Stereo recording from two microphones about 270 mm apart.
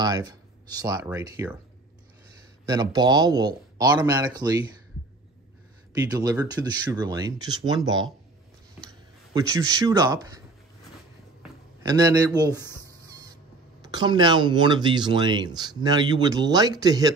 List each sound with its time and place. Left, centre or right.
0.0 s speech: centre
2.6 s speech: centre
5.9 s speech: centre
11.8 s a sound: centre
13.8 s speech: centre